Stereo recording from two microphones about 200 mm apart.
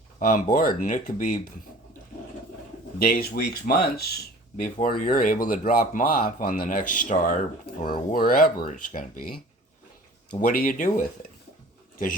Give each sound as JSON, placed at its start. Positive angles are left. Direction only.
{"t": 0.2, "sound": "speech", "side_deg": 45}
{"t": 3.0, "sound": "speech", "side_deg": 50}
{"t": 10.3, "sound": "speech", "side_deg": 45}